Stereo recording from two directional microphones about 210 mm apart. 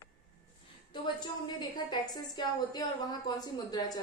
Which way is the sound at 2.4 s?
20° left (ahead or behind).